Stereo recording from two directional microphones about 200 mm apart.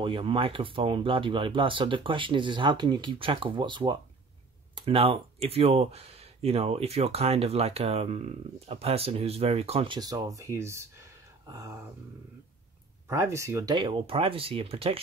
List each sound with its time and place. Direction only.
0.0 s speech: 25° right (ahead or behind)
9.9 s speech: 20° right (ahead or behind)
13.1 s speech: 15° right (ahead or behind)